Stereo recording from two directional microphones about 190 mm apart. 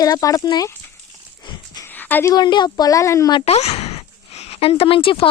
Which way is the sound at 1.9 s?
10° left (ahead or behind).